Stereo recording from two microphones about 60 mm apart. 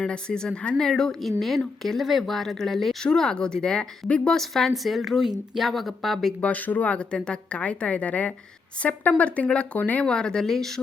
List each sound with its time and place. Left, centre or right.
0.0 s speech: centre
4.4 s speech: centre
6.4 s a woman's voice: left
10.1 s speech: centre